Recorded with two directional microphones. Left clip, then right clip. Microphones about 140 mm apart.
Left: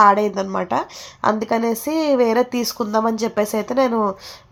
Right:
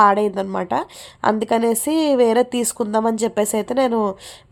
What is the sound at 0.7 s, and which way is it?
Speech, 25° right (ahead or behind).